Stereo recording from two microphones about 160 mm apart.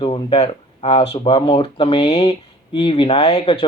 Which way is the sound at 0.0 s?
35° left (ahead or behind).